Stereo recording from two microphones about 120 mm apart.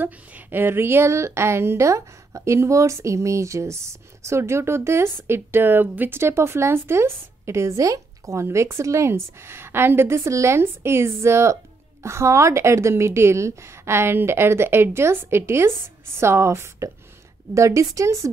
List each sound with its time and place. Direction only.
0.0 s a woman's voice: 15° right (ahead or behind)